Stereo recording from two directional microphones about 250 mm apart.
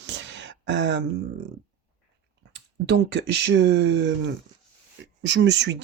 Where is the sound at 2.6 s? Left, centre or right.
Right.